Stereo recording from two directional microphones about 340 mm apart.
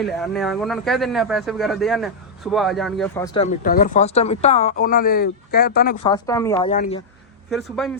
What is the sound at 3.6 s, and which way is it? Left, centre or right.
Speech, left.